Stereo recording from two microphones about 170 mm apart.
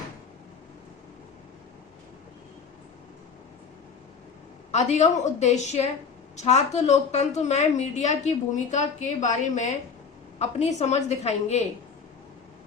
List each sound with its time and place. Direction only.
4.7 s a woman's voice: 40° left (ahead or behind)